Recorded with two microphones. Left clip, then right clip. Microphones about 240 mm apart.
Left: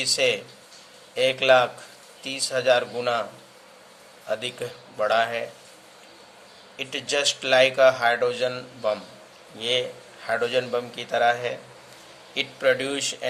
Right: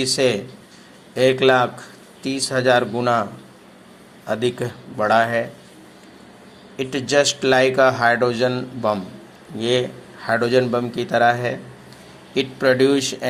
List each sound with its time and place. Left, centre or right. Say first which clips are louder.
0.0 s speech: right 3 dB; centre
4.3 s speech: right 6 dB; centre
6.7 s speech: right 8 dB; centre